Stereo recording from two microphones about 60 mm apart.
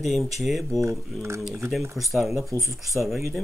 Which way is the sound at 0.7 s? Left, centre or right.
Right.